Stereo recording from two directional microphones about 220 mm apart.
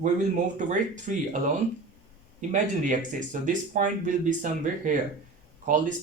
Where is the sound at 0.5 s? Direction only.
35° right (ahead or behind).